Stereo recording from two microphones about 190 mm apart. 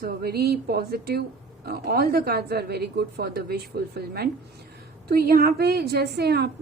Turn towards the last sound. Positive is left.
turn(degrees=-60)  # may be behind; listen again after turning